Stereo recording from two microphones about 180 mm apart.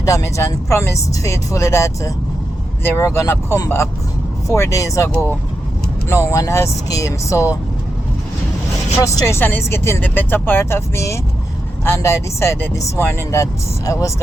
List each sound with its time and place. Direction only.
0.0 s speech: 15° left (ahead or behind)
9.0 s speech: 20° left (ahead or behind)